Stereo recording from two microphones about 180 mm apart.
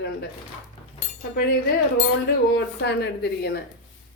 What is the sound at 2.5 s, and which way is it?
Speech, 70° left (ahead or behind).